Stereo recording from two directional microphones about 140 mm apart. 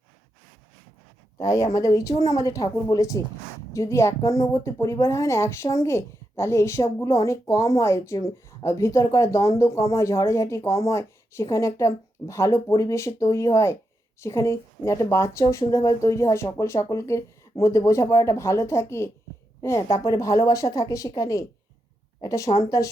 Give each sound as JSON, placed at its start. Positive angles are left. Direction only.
{"t": 1.4, "sound": "a woman's voice", "side_deg": 25}